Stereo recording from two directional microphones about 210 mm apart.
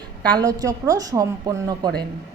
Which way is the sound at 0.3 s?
15° right (ahead or behind).